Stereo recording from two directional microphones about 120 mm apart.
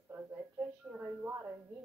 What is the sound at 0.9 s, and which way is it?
Speech, 15° right (ahead or behind).